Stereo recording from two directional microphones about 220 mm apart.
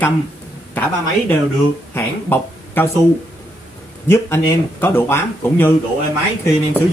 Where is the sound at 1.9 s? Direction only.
10° left (ahead or behind).